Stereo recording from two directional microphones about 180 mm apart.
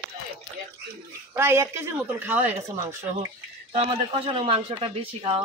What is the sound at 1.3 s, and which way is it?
Speech, 15° right (ahead or behind).